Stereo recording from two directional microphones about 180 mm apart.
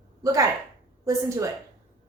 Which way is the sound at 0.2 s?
20° right (ahead or behind).